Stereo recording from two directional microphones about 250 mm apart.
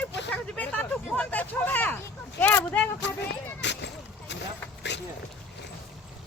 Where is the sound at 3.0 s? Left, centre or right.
Left.